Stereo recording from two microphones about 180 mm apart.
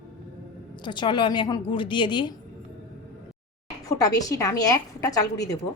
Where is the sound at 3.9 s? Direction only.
20° left (ahead or behind).